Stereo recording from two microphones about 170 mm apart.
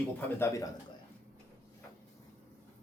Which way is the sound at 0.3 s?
15° left (ahead or behind).